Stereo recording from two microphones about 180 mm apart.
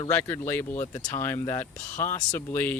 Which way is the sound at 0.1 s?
15° left (ahead or behind).